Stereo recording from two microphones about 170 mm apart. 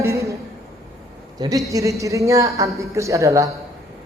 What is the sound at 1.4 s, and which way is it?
A man's voice, 20° right (ahead or behind).